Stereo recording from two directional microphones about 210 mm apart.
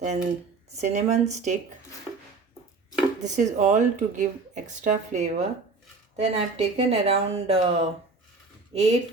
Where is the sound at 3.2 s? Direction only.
35° right (ahead or behind).